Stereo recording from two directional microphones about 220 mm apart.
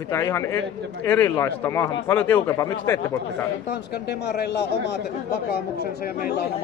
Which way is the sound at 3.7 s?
50° left (ahead or behind).